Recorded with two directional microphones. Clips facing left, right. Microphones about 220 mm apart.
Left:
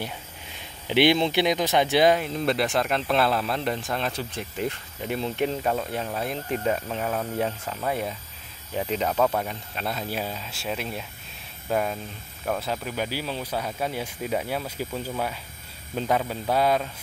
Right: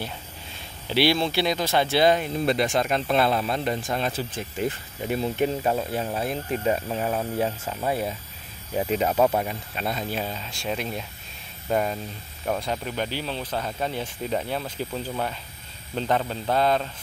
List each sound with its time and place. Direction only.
0.8 s speech: 20° left (ahead or behind)
2.2 s speech: centre (ahead or behind)